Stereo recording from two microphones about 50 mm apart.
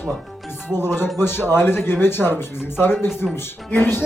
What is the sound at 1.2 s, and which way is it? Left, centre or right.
Speech, left.